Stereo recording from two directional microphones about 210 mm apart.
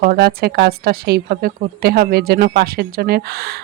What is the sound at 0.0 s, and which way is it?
Speech, 45° right (ahead or behind).